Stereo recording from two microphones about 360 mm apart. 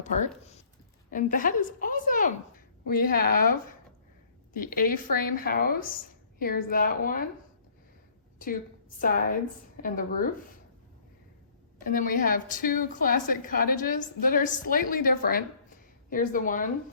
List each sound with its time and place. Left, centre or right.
0.0 s a woman's voice: centre
9.0 s a woman's voice: left
11.8 s a woman's voice: left